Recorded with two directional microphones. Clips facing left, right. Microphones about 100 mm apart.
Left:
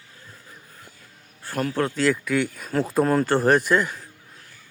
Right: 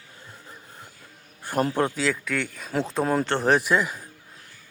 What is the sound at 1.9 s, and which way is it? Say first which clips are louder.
A man's voice: left 5 dB; centre (ahead or behind).